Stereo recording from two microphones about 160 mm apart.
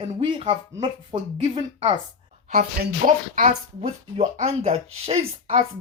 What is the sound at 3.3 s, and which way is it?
Speech, 50° right (ahead or behind).